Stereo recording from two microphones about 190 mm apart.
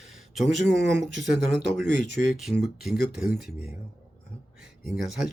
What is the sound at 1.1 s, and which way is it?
Speech, 75° right (ahead or behind).